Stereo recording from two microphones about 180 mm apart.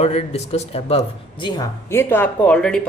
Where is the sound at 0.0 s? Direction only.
35° left (ahead or behind).